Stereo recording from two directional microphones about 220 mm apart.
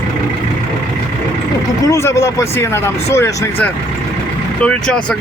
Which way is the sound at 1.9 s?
10° left (ahead or behind).